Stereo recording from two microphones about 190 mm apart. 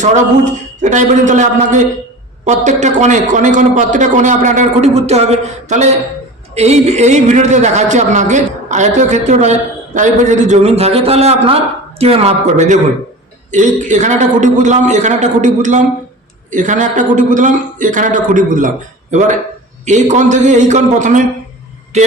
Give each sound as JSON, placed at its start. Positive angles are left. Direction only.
{"t": 0.0, "sound": "a man's voice", "side_deg": -40}
{"t": 19.8, "sound": "a man's voice", "side_deg": -40}